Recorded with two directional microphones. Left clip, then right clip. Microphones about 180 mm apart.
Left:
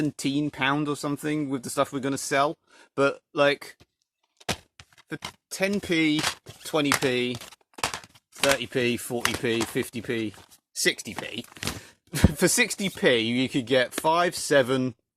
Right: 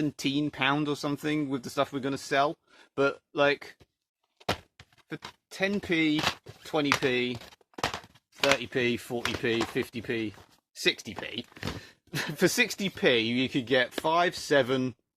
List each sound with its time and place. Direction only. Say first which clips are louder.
0.0 s speech: left 2 dB; 35° left (ahead or behind)
4.4 s a sound: even; centre (ahead or behind)
5.0 s speech: left 5 dB; 40° left (ahead or behind)
8.4 s speech: left 2 dB; 45° left (ahead or behind)